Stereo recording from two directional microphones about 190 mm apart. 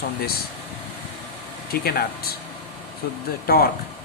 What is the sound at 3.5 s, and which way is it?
Speech, 55° left (ahead or behind).